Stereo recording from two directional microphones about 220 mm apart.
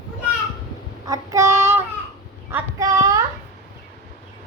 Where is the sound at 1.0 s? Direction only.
15° right (ahead or behind).